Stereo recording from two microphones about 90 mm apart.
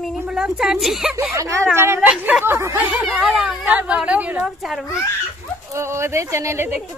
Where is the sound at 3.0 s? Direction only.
5° right (ahead or behind).